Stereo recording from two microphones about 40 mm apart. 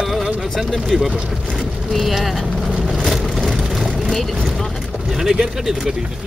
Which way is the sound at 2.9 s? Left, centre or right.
Centre.